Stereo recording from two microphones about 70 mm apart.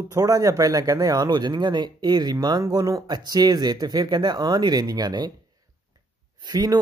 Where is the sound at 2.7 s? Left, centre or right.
Right.